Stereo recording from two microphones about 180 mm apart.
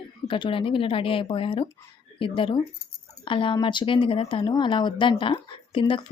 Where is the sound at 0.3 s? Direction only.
30° left (ahead or behind).